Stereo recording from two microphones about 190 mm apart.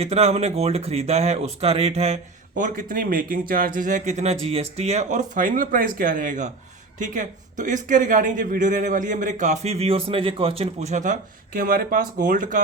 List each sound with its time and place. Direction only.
0.0 s a man's voice: 35° right (ahead or behind)